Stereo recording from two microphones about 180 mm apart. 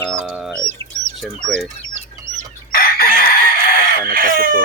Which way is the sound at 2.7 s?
55° left (ahead or behind).